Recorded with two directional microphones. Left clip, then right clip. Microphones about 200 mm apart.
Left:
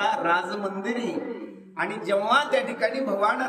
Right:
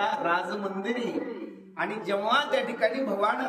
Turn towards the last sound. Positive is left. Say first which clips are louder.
# left 3 dB
turn(degrees=15)  # may be behind; listen again after turning